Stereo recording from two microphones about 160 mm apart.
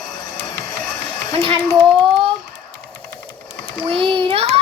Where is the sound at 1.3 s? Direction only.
35° right (ahead or behind).